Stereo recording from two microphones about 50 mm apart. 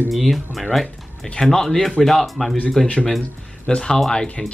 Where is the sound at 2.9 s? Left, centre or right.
Left.